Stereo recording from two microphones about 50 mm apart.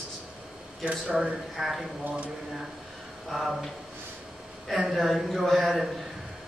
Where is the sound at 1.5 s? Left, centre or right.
Centre.